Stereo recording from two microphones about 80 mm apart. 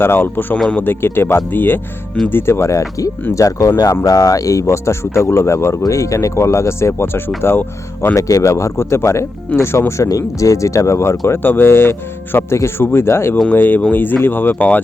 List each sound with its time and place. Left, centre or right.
0.0 s speech: left
4.0 s speech: left